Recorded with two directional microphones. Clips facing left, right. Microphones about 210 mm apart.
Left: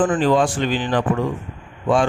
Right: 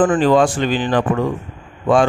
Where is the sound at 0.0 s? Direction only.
80° right; by 0.5 s 65° right (ahead or behind).